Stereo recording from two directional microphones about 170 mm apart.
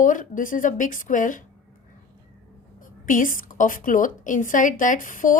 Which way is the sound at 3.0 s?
50° left (ahead or behind).